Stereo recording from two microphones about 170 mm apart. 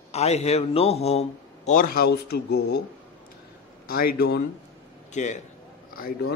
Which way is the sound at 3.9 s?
65° left (ahead or behind).